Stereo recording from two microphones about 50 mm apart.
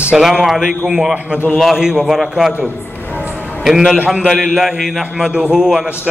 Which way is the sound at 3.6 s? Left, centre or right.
Centre.